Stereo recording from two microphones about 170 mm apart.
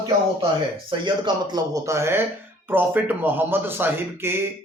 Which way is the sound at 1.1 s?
25° right (ahead or behind).